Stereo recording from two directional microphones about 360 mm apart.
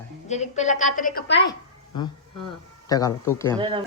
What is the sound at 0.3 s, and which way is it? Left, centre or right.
A woman's voice, centre.